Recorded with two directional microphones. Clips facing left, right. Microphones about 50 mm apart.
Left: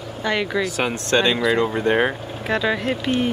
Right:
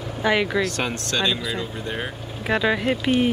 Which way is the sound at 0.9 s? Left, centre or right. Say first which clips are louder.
Left 5 dB; left.